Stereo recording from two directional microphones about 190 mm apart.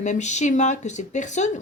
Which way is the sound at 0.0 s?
40° left (ahead or behind).